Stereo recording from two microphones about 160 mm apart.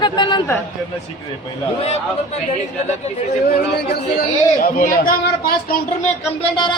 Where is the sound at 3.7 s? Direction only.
90° left.